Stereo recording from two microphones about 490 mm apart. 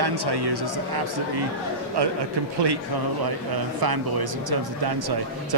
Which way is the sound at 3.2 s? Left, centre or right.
Right.